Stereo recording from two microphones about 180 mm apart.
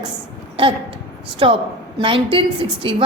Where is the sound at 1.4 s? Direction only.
30° right (ahead or behind).